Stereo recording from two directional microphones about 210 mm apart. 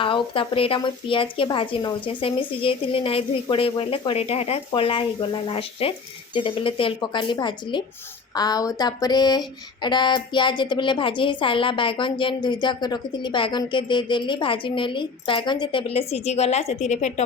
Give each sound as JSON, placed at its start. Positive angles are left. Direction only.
{"t": 0.0, "sound": "speech", "side_deg": 25}